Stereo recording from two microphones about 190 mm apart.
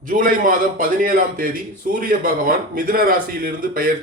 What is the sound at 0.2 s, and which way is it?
A man's voice, 45° right (ahead or behind).